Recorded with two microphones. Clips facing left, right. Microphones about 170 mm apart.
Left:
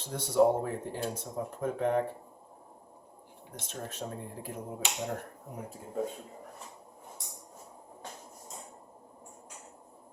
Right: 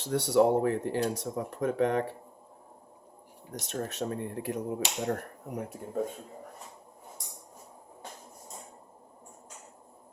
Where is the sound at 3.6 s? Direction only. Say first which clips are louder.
Right 6 dB; 70° right (ahead or behind).